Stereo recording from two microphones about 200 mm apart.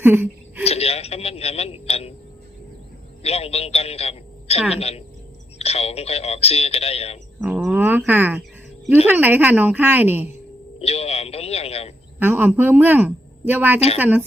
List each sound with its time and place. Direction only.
0.0 s a sound: 10° right (ahead or behind)
0.6 s a man's voice: 30° left (ahead or behind)
3.2 s a man's voice: 30° left (ahead or behind)
7.3 s speech: 5° right (ahead or behind)
10.8 s a man's voice: 30° left (ahead or behind)
12.2 s speech: 10° right (ahead or behind)